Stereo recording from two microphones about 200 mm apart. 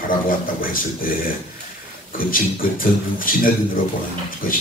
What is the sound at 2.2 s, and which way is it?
Speech, 45° left (ahead or behind).